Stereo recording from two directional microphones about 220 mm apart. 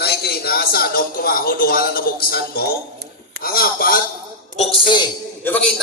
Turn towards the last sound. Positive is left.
turn(degrees=5)  # may be behind; listen again after turning